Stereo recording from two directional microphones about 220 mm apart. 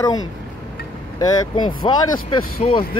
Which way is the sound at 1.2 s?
20° left (ahead or behind).